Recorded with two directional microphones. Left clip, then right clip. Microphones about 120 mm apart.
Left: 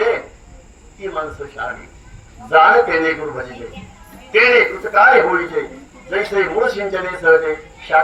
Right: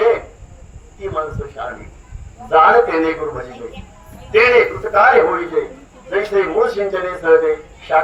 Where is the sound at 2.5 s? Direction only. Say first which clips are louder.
Even; 30° right (ahead or behind).